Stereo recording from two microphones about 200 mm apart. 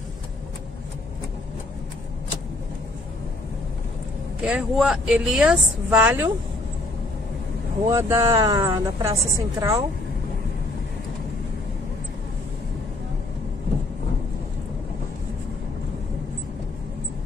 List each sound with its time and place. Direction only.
4.4 s speech: 5° right (ahead or behind)
7.9 s speech: 15° right (ahead or behind)